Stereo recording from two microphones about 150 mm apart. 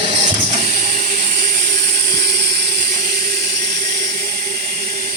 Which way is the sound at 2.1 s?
90° right.